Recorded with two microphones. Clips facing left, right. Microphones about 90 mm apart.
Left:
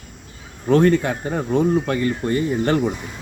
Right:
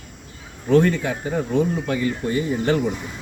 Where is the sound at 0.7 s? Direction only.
45° left (ahead or behind).